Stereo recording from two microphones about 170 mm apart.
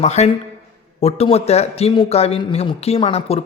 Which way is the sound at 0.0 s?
40° left (ahead or behind).